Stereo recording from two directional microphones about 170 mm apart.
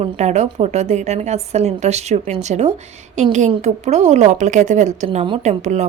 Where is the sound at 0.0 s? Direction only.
40° right (ahead or behind).